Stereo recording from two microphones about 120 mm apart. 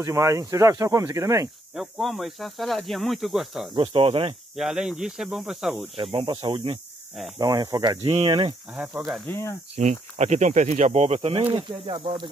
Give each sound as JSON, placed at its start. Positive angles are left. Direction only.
{"t": 0.0, "sound": "speech", "side_deg": -25}
{"t": 1.8, "sound": "speech", "side_deg": 0}
{"t": 3.7, "sound": "speech", "side_deg": -50}
{"t": 4.6, "sound": "speech", "side_deg": -5}
{"t": 6.4, "sound": "speech", "side_deg": -45}
{"t": 7.3, "sound": "speech", "side_deg": -30}
{"t": 8.0, "sound": "speech", "side_deg": -45}
{"t": 8.7, "sound": "speech", "side_deg": -10}
{"t": 9.3, "sound": "speech", "side_deg": 20}
{"t": 9.8, "sound": "speech", "side_deg": -75}
{"t": 11.5, "sound": "speech", "side_deg": -45}